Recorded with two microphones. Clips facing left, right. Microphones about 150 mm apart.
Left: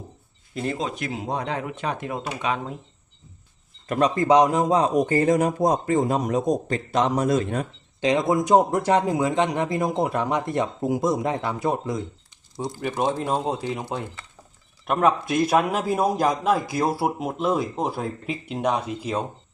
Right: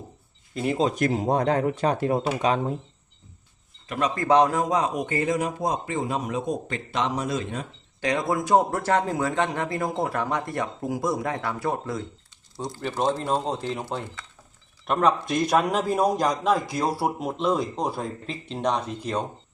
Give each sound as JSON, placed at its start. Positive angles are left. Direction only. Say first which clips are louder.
{"t": 0.8, "sound": "speech", "louder": "right 6 dB", "side_deg": -40}
{"t": 3.8, "sound": "speech", "louder": "left 5 dB", "side_deg": 45}
{"t": 4.1, "sound": "speech", "louder": "left 1 dB", "side_deg": 20}
{"t": 4.7, "sound": "a man's voice", "louder": "left 5 dB", "side_deg": 35}
{"t": 8.0, "sound": "a man's voice", "louder": "left 4 dB", "side_deg": 20}